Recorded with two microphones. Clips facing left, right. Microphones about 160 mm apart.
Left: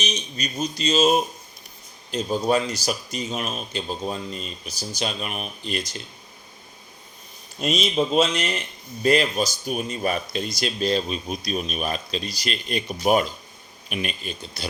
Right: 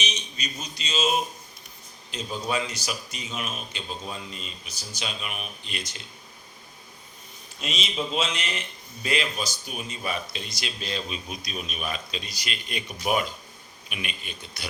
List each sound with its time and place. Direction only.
0.0 s speech: 40° left (ahead or behind)
7.6 s speech: 40° left (ahead or behind)